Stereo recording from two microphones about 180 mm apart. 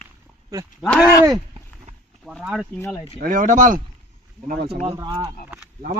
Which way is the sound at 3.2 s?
50° right (ahead or behind).